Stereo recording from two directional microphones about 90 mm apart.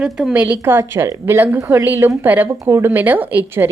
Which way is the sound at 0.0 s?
10° right (ahead or behind).